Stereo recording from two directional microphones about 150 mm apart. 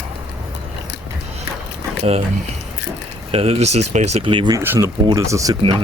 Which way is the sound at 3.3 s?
40° right (ahead or behind).